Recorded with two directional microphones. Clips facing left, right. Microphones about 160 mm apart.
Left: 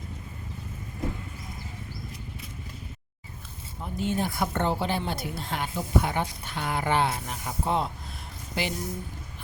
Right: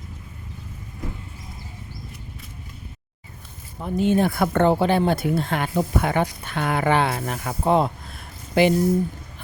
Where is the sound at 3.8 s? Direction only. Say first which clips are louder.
Right 9 dB; 70° right (ahead or behind).